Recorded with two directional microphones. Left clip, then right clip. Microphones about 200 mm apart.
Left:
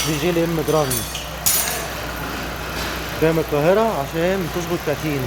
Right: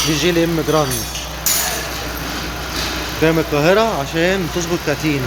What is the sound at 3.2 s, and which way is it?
Speech, centre (ahead or behind).